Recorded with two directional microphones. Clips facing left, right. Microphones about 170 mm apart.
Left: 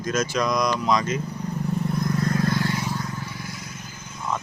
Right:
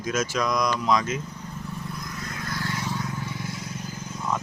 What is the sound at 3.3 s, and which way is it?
Vehicle, 25° right (ahead or behind).